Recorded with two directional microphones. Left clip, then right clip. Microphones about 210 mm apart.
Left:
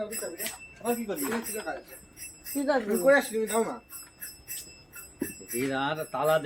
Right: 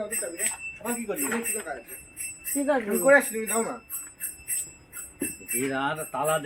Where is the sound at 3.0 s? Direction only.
15° left (ahead or behind).